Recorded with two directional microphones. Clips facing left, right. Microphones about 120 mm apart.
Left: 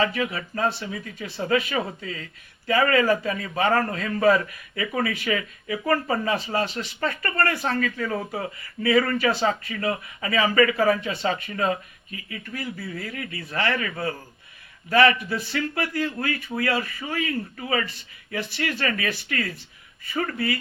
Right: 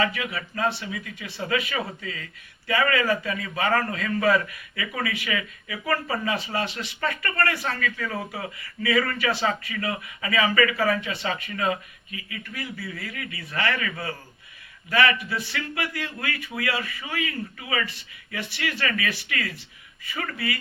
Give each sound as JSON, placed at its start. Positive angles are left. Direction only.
{"t": 0.0, "sound": "a man's voice", "side_deg": 35}